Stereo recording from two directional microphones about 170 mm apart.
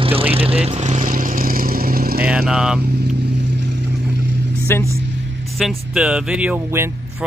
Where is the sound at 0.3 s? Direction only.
35° right (ahead or behind); by 2.2 s 60° right (ahead or behind).